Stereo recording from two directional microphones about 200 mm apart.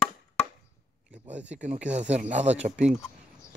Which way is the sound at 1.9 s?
35° right (ahead or behind).